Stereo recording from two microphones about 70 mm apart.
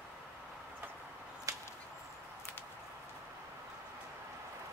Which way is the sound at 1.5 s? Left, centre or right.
Right.